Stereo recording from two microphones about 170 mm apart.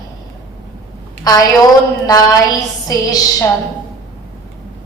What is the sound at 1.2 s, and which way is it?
A woman's voice, 20° left (ahead or behind).